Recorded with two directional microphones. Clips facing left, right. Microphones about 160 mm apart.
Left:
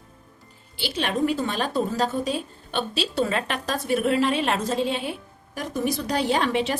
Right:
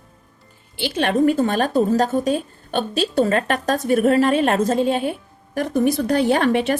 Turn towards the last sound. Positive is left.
turn(degrees=-55)  # may be behind; listen again after turning